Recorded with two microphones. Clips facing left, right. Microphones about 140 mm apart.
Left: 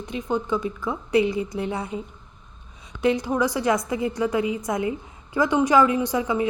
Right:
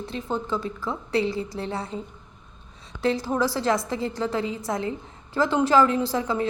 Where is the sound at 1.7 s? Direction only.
20° left (ahead or behind).